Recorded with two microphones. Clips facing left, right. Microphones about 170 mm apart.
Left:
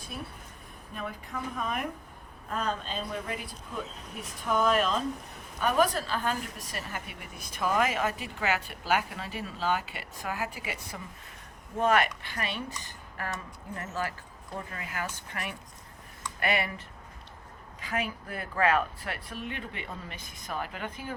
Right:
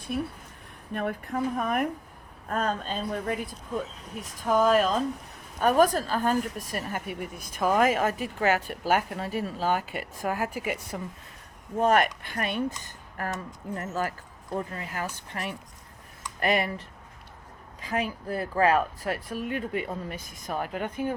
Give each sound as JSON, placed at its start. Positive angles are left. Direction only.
{"t": 0.9, "sound": "a woman's voice", "side_deg": -55}
{"t": 4.4, "sound": "a woman's voice", "side_deg": -35}
{"t": 11.8, "sound": "a woman's voice", "side_deg": -45}